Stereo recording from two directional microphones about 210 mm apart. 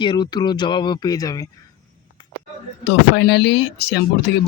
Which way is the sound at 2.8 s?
50° left (ahead or behind).